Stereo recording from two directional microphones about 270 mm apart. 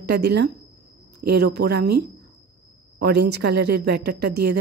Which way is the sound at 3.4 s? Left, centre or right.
Right.